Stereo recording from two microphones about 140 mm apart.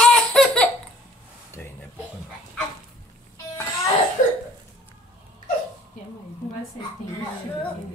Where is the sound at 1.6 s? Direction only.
15° left (ahead or behind).